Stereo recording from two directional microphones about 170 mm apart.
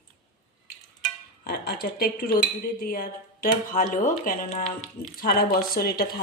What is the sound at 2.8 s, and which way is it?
Speech, 55° left (ahead or behind).